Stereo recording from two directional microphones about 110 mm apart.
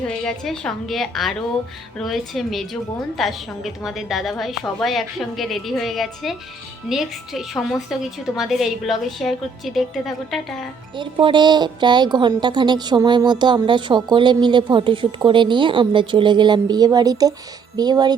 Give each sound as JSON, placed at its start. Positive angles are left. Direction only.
{"t": 0.3, "sound": "a woman's voice", "side_deg": 5}
{"t": 10.9, "sound": "a woman's voice", "side_deg": -45}